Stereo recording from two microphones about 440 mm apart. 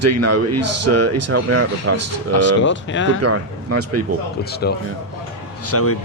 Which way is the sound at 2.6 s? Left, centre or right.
Left.